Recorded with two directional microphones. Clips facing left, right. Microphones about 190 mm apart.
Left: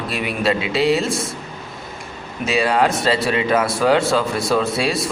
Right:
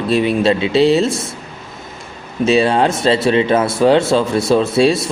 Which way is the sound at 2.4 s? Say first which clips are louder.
Right 4 dB; 25° right (ahead or behind).